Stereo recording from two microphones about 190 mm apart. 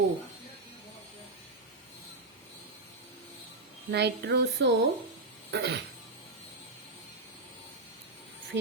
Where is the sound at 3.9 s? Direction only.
60° right (ahead or behind).